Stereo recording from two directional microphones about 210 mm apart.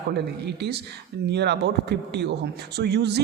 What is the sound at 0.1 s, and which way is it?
Speech, 50° right (ahead or behind).